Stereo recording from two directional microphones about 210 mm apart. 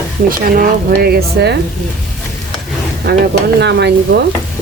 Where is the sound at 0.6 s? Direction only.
45° right (ahead or behind).